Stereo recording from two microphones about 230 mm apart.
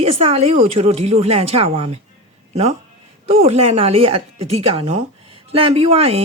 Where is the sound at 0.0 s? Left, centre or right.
Right.